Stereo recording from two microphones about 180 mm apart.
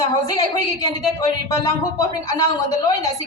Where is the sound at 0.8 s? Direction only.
20° left (ahead or behind).